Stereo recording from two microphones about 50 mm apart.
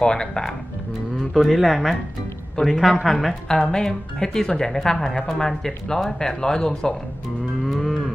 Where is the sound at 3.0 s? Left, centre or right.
Centre.